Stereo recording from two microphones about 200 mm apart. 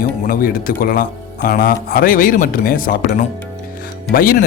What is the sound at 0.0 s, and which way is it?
Speech, 45° left (ahead or behind).